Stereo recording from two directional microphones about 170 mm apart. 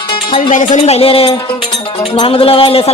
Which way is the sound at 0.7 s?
40° left (ahead or behind).